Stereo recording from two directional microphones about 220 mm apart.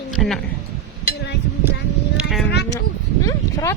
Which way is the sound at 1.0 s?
50° left (ahead or behind).